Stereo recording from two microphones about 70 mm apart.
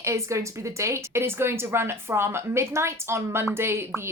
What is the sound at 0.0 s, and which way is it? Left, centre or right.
A woman's voice, right.